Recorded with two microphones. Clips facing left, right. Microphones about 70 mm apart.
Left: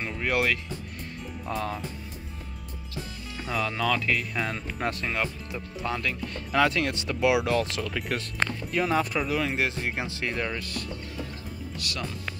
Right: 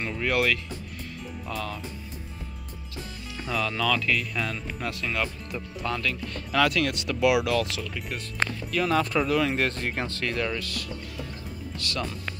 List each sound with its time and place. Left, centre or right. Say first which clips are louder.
0.0 s speech: right 1 dB; centre
1.5 s speech: left 3 dB; left
3.4 s speech: right 1 dB; centre
8.8 s speech: right 3 dB; centre